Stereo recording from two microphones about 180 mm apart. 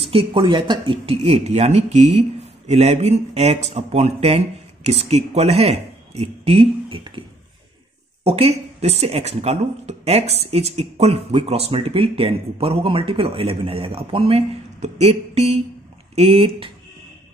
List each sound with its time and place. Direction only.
0.0 s speech: 30° right (ahead or behind)